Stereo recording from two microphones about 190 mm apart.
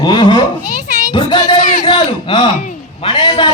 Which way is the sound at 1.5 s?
40° left (ahead or behind).